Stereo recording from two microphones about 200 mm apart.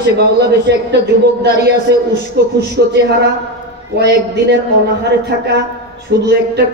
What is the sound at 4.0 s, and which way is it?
Speech, 60° right (ahead or behind).